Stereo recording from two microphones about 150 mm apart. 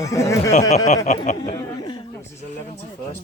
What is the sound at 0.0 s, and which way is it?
Speech, 20° left (ahead or behind).